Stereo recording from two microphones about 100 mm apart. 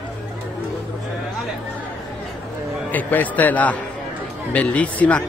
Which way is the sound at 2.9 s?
15° left (ahead or behind).